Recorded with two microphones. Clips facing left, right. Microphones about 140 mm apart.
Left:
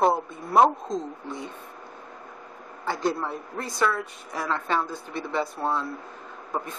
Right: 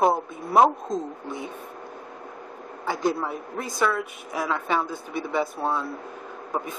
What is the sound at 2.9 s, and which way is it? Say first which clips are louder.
A woman's voice: right 1 dB; 5° right (ahead or behind).